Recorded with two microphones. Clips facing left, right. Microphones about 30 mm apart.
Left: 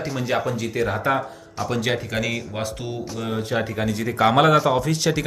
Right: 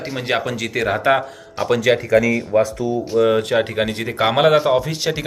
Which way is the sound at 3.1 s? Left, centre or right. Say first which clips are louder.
Right 19 dB; right.